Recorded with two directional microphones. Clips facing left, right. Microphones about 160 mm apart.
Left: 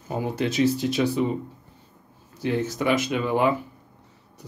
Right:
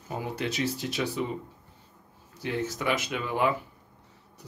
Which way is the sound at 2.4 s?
20° left (ahead or behind).